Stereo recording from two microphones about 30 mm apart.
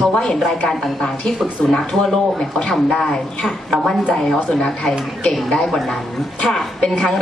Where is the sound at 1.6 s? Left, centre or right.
Left.